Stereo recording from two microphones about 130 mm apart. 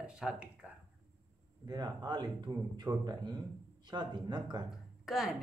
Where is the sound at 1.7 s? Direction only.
30° right (ahead or behind).